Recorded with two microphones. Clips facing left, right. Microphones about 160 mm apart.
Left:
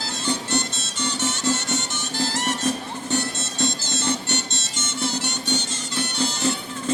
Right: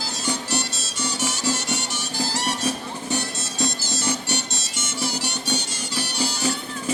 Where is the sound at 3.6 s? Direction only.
25° left (ahead or behind).